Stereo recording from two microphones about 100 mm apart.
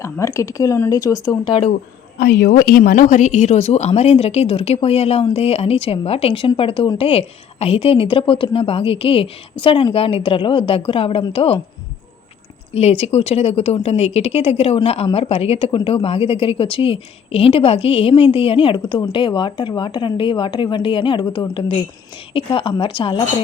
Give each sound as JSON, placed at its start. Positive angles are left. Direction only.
{"t": 0.0, "sound": "speech", "side_deg": 30}
{"t": 3.6, "sound": "a woman's voice", "side_deg": 90}
{"t": 12.7, "sound": "a woman's voice", "side_deg": 90}